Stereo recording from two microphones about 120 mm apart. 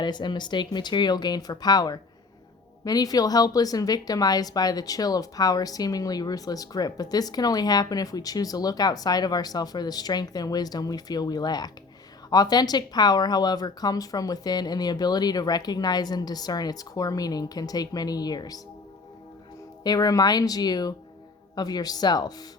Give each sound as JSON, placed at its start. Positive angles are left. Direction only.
{"t": 0.0, "sound": "speech", "side_deg": 40}
{"t": 19.8, "sound": "speech", "side_deg": 30}